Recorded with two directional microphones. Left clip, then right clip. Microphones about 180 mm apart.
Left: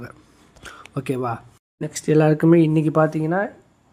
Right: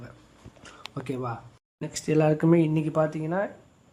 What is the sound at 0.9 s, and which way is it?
Speech, 35° left (ahead or behind).